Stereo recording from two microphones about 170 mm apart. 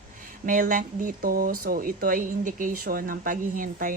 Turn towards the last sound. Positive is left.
turn(degrees=-50)  # may be behind; listen again after turning